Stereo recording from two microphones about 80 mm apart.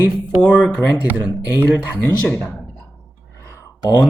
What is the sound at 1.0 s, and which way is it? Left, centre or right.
Speech, right.